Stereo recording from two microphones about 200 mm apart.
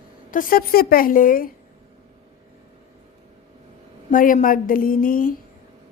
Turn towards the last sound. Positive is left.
turn(degrees=45)  # may be behind; listen again after turning